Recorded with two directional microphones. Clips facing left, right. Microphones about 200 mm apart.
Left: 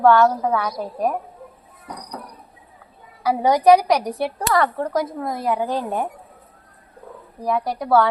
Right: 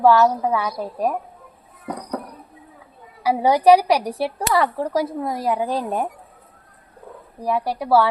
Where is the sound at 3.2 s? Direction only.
10° right (ahead or behind).